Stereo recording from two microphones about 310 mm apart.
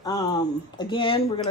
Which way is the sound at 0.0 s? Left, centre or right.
Centre.